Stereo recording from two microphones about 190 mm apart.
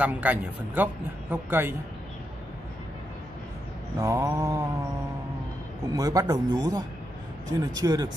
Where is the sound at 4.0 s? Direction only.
15° right (ahead or behind).